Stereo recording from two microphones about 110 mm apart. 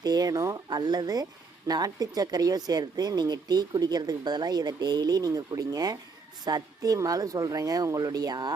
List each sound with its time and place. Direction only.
0.0 s speech: 35° right (ahead or behind)